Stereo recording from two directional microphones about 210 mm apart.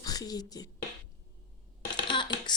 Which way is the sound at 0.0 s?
20° left (ahead or behind).